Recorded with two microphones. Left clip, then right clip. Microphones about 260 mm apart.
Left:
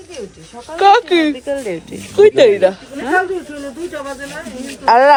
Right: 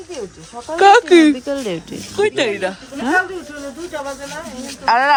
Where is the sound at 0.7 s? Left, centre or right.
Right.